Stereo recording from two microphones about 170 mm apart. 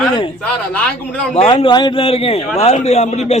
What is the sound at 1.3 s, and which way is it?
A man's voice, 30° left (ahead or behind).